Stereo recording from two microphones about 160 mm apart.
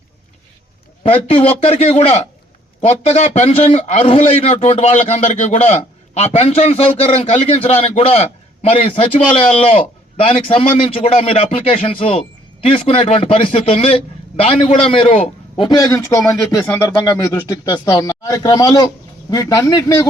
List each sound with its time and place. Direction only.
1.0 s a man's voice: 35° left (ahead or behind); by 20.1 s 20° left (ahead or behind)